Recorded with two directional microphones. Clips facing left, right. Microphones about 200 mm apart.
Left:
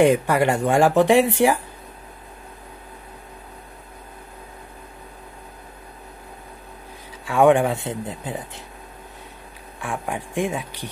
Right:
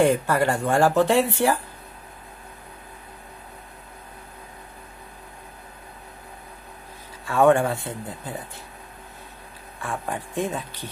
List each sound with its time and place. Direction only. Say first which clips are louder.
0.0 s speech: left 3 dB; 15° left (ahead or behind)
7.2 s speech: left 2 dB; 15° left (ahead or behind)
9.8 s speech: left 2 dB; 15° left (ahead or behind)